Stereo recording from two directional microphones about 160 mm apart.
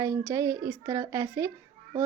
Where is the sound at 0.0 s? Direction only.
20° right (ahead or behind).